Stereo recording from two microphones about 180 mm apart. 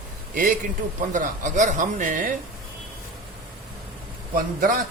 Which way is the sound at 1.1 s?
45° right (ahead or behind).